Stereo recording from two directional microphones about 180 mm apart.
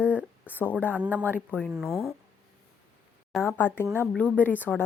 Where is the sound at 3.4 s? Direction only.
10° left (ahead or behind).